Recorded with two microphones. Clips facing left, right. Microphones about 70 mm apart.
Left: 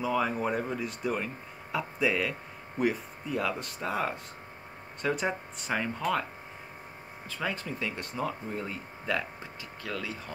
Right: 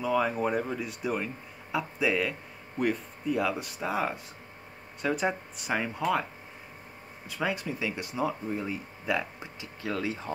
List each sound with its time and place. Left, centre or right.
0.0 s speech: centre
7.2 s speech: centre